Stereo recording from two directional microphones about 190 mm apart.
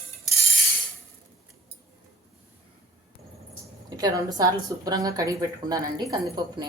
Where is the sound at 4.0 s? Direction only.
20° right (ahead or behind).